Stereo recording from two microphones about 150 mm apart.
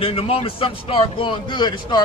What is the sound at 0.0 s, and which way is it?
A man's voice, 40° left (ahead or behind).